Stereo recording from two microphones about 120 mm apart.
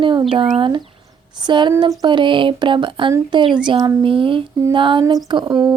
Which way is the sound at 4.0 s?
45° right (ahead or behind).